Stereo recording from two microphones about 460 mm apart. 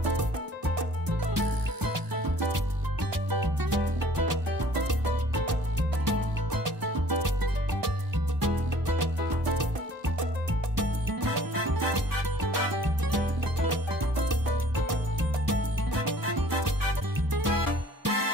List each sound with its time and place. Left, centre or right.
1.0 s music: right
3.3 s music: right
6.0 s music: right
8.4 s music: right
10.8 s music: right
16.3 s music: right